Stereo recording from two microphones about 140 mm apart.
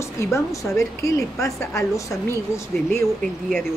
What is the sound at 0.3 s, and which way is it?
A woman's voice, 20° left (ahead or behind).